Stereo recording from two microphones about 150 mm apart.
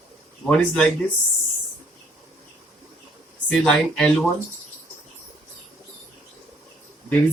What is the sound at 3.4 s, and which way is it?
Speech, 5° left (ahead or behind).